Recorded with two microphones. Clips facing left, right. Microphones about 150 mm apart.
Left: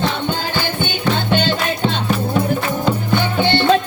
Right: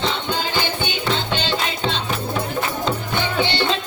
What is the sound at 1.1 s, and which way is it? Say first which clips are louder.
Music: left 6 dB; 50° left (ahead or behind).